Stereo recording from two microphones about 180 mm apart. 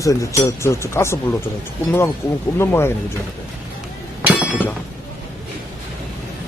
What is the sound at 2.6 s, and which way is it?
Speech, 15° left (ahead or behind).